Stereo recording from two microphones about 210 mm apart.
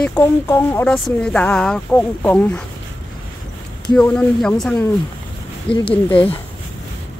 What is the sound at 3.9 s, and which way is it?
Speech, 5° left (ahead or behind).